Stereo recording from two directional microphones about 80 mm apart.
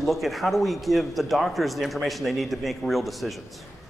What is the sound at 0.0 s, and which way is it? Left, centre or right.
Speech, centre.